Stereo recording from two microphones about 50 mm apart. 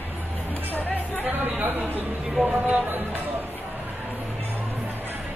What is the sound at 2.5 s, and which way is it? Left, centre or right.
Speech, right.